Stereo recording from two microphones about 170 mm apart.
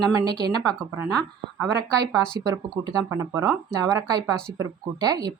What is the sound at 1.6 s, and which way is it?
Speech, 20° right (ahead or behind).